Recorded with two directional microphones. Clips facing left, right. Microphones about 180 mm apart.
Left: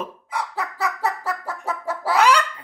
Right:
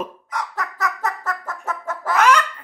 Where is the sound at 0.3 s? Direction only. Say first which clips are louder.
Left 3 dB; 10° left (ahead or behind).